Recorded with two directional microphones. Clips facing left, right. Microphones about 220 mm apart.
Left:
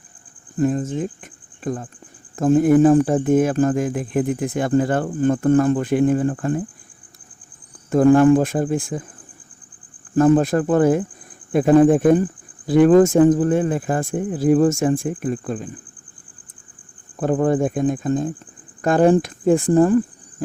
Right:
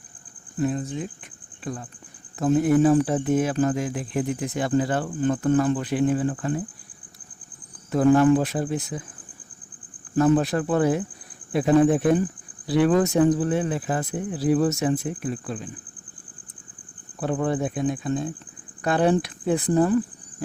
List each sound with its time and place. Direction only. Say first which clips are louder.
0.6 s speech: left 6 dB; 45° left (ahead or behind)
7.9 s speech: left 5 dB; 50° left (ahead or behind)
10.2 s speech: left 5 dB; 50° left (ahead or behind)
17.2 s speech: left 6 dB; 45° left (ahead or behind)